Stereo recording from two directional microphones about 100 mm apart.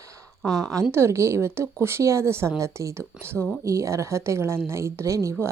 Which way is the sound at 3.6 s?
30° right (ahead or behind).